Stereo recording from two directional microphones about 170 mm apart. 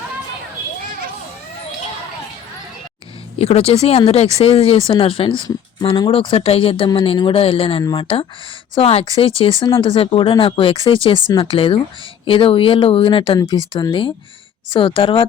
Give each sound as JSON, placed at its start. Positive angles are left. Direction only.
{"t": 3.3, "sound": "speech", "side_deg": 35}